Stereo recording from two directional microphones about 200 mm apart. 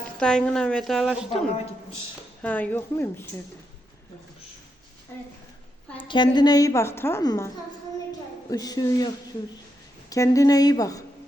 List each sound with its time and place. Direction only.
0.2 s a woman's voice: 5° left (ahead or behind)
2.4 s a woman's voice: 10° left (ahead or behind)
6.1 s a woman's voice: 20° left (ahead or behind)